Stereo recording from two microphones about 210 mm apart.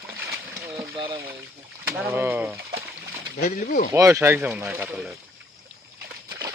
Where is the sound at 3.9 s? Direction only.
15° right (ahead or behind).